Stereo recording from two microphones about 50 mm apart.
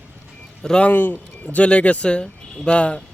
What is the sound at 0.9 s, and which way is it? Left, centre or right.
Speech, left.